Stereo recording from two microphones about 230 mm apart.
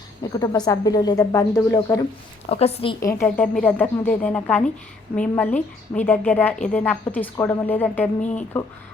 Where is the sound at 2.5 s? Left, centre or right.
Left.